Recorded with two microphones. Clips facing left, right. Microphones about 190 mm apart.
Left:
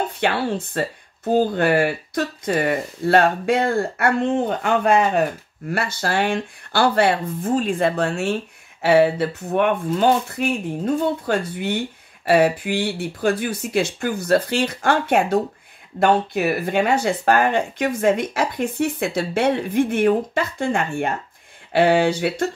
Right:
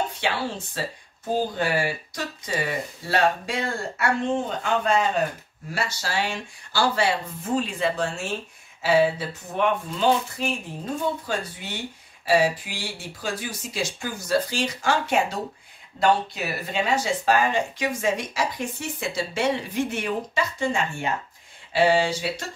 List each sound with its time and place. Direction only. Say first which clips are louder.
0.2 s speech: left 6 dB; 60° left (ahead or behind)